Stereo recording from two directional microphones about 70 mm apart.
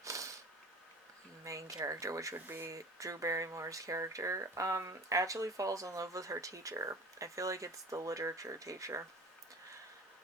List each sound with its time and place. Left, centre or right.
0.0 s a sound: right
1.5 s speech: right
2.3 s speech: right
2.6 s speech: right